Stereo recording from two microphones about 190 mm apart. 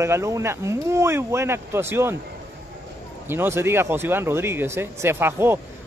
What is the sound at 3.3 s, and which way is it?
A man's voice, 10° right (ahead or behind).